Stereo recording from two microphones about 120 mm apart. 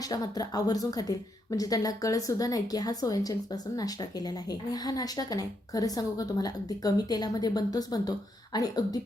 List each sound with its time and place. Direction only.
0.1 s a woman's voice: 30° left (ahead or behind)